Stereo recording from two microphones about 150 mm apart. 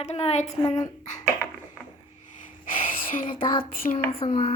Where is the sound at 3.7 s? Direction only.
70° left (ahead or behind).